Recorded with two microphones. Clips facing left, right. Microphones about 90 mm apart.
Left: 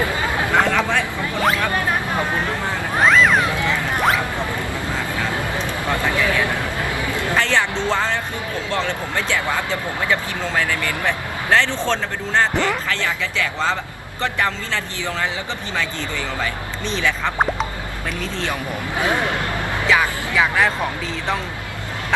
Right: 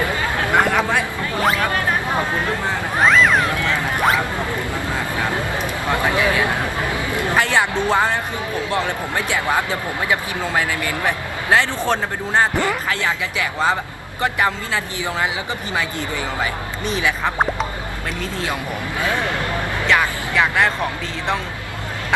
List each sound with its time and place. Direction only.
0.5 s chatter: 15° right (ahead or behind)
1.4 s speech: centre (ahead or behind)
3.0 s speech: centre (ahead or behind)
3.5 s speech: 20° left (ahead or behind)
4.9 s speech: 20° right (ahead or behind)
16.4 s speech: 15° right (ahead or behind)
19.9 s speech: 5° left (ahead or behind)